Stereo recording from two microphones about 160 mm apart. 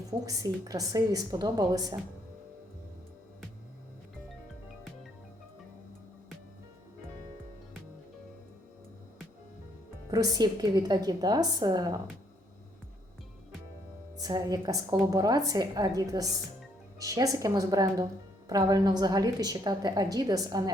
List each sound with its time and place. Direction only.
0.3 s a woman's voice: 25° right (ahead or behind)
10.1 s a woman's voice: 25° right (ahead or behind)
14.2 s a woman's voice: 25° right (ahead or behind)